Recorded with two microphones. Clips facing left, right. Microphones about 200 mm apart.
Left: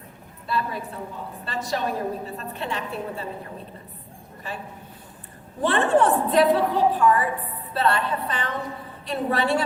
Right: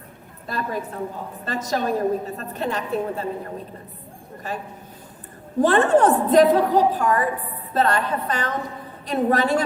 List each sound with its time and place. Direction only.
0.4 s a woman's voice: 45° right (ahead or behind)
5.6 s a woman's voice: 45° right (ahead or behind)